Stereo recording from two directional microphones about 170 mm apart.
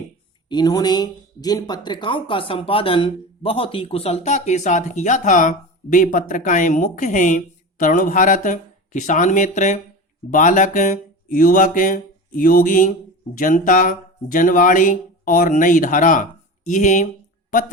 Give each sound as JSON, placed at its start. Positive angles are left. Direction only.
{"t": 0.4, "sound": "speech", "side_deg": 25}